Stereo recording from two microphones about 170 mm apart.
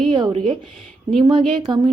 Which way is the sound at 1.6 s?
25° right (ahead or behind).